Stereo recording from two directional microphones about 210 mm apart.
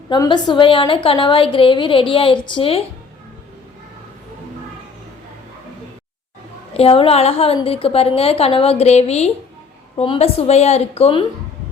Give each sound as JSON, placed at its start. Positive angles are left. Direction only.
{"t": 0.1, "sound": "a woman's voice", "side_deg": 20}
{"t": 6.7, "sound": "a woman's voice", "side_deg": 25}